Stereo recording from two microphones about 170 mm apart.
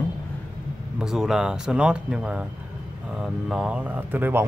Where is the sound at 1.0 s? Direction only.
5° right (ahead or behind).